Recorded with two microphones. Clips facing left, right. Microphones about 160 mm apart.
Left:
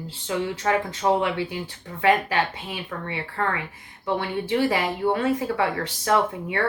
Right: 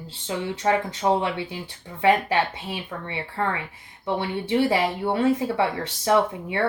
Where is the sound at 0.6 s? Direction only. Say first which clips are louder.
Right 2 dB; 25° right (ahead or behind).